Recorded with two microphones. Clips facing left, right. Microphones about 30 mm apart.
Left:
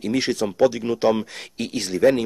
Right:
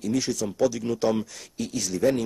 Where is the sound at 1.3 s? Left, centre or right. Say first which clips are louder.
Left 3 dB; left.